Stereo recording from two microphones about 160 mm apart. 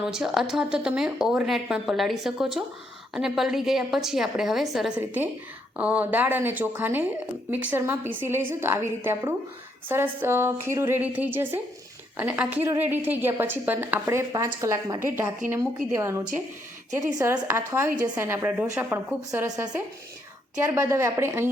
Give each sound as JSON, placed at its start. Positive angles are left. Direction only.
{"t": 0.0, "sound": "a woman's voice", "side_deg": -5}
{"t": 20.7, "sound": "a woman's voice", "side_deg": -15}